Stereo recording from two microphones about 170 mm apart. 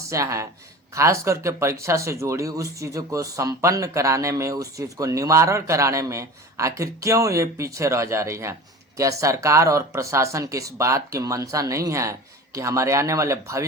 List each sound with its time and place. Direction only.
0.1 s speech: 20° right (ahead or behind)